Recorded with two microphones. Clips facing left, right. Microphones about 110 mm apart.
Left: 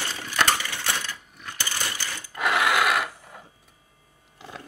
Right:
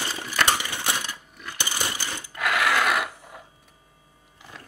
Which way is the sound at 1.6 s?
20° right (ahead or behind).